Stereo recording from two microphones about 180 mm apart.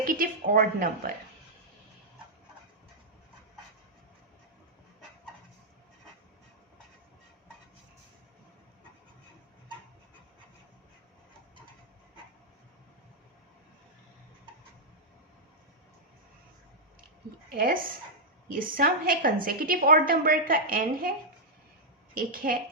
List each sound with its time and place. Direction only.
0.0 s a woman's voice: 50° right (ahead or behind)
17.5 s a woman's voice: 50° right (ahead or behind)
22.1 s a woman's voice: 50° right (ahead or behind)